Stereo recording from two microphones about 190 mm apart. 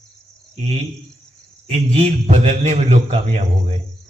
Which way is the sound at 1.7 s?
35° right (ahead or behind).